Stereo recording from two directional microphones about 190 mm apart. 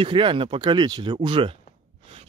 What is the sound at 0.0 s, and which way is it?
Speech, 25° right (ahead or behind).